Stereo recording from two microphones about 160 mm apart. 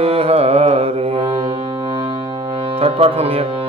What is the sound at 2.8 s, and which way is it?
Music, 40° right (ahead or behind).